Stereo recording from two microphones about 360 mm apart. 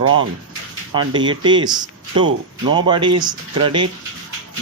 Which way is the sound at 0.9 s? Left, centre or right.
Centre.